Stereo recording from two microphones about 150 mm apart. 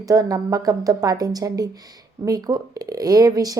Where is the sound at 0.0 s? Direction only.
25° right (ahead or behind).